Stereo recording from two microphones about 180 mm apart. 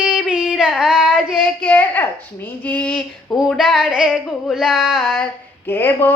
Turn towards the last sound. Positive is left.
turn(degrees=10)  # may be behind; listen again after turning